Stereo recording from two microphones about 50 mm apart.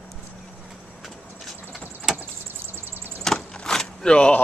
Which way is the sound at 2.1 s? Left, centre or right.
Centre.